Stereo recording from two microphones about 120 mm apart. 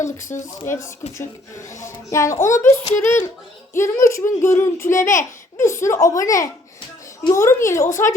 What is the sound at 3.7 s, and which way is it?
A child's voice, 25° left (ahead or behind).